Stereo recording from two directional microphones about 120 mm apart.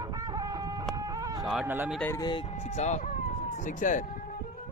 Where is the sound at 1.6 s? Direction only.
15° right (ahead or behind).